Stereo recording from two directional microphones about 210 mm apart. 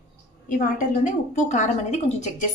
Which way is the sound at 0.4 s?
40° left (ahead or behind).